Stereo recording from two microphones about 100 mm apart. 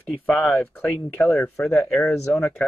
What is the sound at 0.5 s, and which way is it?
Speech, 15° left (ahead or behind).